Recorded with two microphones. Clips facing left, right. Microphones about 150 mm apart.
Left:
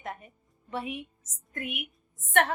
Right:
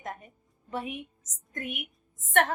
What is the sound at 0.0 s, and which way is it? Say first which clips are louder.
Music: even; 40° right (ahead or behind).